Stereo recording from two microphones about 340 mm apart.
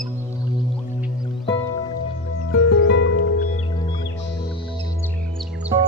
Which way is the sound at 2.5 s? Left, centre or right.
Left.